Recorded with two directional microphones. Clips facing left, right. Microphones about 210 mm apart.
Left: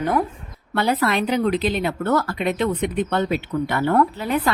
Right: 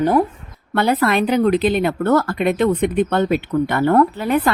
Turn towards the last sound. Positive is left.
turn(degrees=-55)  # may be behind; listen again after turning